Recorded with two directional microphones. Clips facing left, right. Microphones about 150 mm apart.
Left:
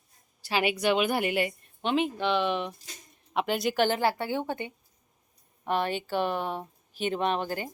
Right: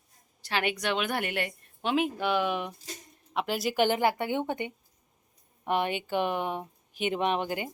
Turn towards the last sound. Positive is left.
turn(degrees=-15)  # may be behind; listen again after turning